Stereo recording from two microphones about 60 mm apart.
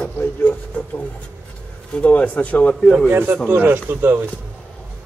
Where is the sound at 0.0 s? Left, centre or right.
Left.